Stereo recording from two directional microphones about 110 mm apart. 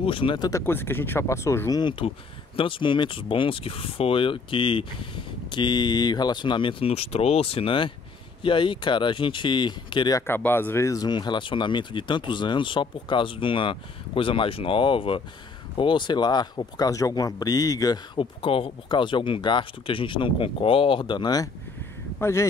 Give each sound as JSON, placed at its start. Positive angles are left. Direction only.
{"t": 0.0, "sound": "speech", "side_deg": 50}
{"t": 0.5, "sound": "speech", "side_deg": 25}
{"t": 1.8, "sound": "speech", "side_deg": 45}
{"t": 10.1, "sound": "speech", "side_deg": 20}
{"t": 18.1, "sound": "speech", "side_deg": 55}
{"t": 22.2, "sound": "speech", "side_deg": 25}